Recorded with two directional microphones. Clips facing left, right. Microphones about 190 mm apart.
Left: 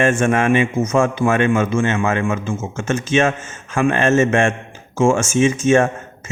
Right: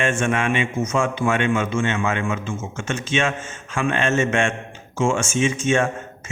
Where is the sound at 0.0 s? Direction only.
45° left (ahead or behind).